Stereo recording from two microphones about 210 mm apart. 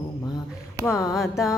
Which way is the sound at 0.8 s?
15° left (ahead or behind).